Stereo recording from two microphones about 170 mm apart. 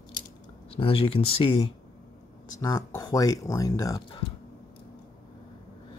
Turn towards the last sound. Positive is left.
turn(degrees=25)  # may be behind; listen again after turning